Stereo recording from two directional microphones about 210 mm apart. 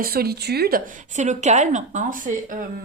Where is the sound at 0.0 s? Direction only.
45° right (ahead or behind).